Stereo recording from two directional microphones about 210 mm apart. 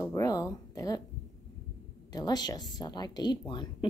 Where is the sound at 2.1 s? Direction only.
20° left (ahead or behind).